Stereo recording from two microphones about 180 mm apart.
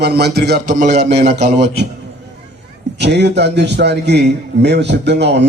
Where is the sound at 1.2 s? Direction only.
35° right (ahead or behind).